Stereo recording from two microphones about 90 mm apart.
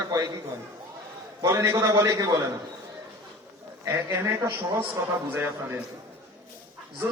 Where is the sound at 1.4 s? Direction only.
35° right (ahead or behind).